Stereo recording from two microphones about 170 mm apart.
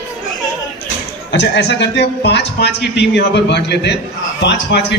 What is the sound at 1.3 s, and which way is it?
A man's voice, 90° left.